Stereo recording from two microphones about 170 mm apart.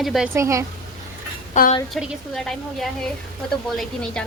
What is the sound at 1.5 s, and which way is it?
Speech, 45° left (ahead or behind).